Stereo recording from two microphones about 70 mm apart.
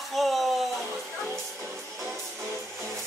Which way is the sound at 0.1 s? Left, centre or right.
Centre.